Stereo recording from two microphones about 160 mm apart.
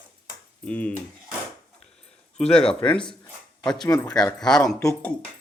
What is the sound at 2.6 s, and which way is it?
Speech, 30° left (ahead or behind).